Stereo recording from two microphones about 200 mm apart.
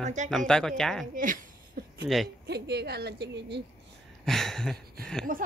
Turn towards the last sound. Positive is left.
turn(degrees=-45)  # may be behind; listen again after turning